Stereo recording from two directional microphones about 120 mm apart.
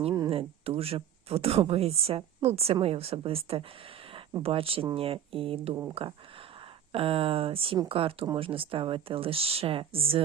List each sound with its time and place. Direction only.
0.3 s speech: 55° right (ahead or behind)